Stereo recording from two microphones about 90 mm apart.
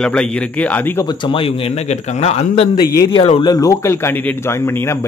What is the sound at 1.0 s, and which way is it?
Speech, 65° left (ahead or behind).